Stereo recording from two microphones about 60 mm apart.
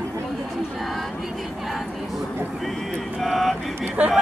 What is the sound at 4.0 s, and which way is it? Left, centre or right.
Speech, right.